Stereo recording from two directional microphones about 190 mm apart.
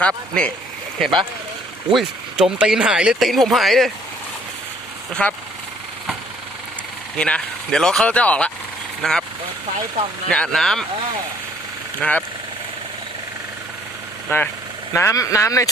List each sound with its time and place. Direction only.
0.0 s speech: 5° left (ahead or behind)
5.2 s speech: 5° left (ahead or behind)
7.2 s speech: 5° left (ahead or behind)
10.2 s speech: 5° left (ahead or behind)
11.9 s speech: 5° left (ahead or behind)
14.3 s speech: 10° left (ahead or behind)